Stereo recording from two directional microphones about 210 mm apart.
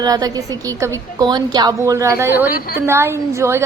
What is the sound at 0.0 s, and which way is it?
A woman's voice, 20° right (ahead or behind).